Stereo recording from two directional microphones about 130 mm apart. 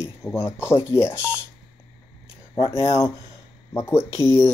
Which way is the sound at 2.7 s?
20° left (ahead or behind).